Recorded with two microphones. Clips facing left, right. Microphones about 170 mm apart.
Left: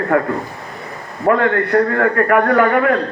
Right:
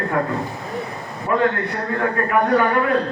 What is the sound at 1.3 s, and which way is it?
A man's voice, 70° left (ahead or behind).